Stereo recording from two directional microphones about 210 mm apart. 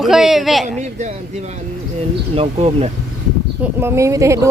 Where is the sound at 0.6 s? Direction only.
35° right (ahead or behind).